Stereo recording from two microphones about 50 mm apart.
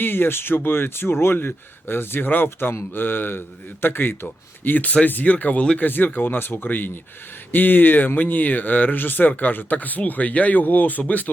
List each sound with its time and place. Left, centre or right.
0.0 s speech: left